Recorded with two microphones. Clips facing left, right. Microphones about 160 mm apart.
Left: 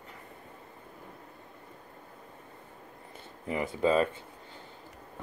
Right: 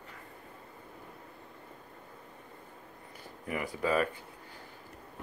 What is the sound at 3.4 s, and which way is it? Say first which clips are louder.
Speech: left 5 dB; 25° left (ahead or behind).